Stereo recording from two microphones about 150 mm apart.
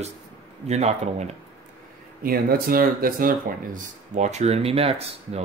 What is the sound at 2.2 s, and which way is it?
Speech, 75° right (ahead or behind).